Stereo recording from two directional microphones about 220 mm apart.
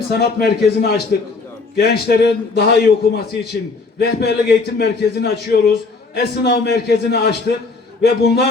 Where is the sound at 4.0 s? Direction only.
45° left (ahead or behind).